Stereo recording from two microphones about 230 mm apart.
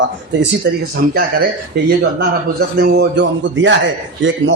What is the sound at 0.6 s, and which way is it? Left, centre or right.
A man's voice, right.